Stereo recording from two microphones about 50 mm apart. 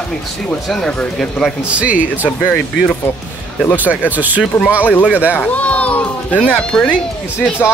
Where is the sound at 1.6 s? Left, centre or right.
Right.